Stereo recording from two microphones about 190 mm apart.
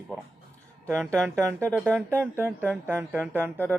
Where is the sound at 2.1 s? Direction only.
10° right (ahead or behind).